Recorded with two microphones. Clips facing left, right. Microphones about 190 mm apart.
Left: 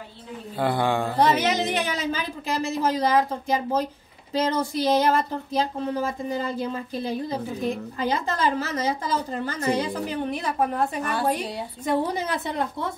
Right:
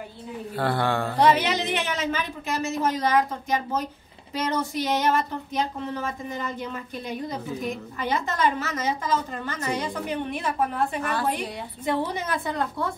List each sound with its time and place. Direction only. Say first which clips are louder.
0.6 s speech: left 2 dB; 15° left (ahead or behind)
1.2 s a woman's voice: right 1 dB; 45° left (ahead or behind); by 12.9 s 20° left (ahead or behind)